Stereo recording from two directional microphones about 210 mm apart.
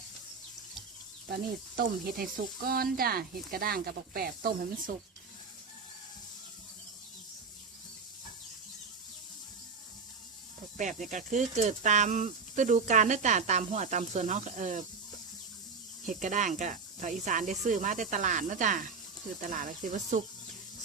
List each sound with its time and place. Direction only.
1.3 s speech: 45° right (ahead or behind)
10.8 s speech: 35° right (ahead or behind)
16.0 s speech: 35° right (ahead or behind)